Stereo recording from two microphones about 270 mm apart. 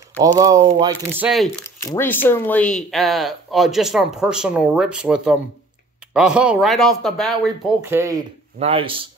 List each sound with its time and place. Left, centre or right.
0.4 s speech: centre
2.2 s speech: centre
8.5 s speech: right